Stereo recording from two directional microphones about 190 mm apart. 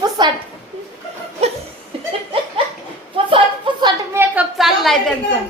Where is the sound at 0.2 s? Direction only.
25° right (ahead or behind).